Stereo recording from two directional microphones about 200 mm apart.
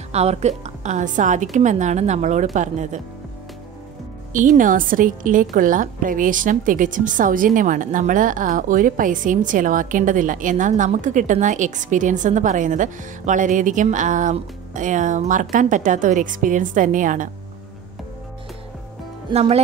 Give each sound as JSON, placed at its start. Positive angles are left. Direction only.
{"t": 0.1, "sound": "a woman's voice", "side_deg": -30}
{"t": 4.3, "sound": "a woman's voice", "side_deg": -40}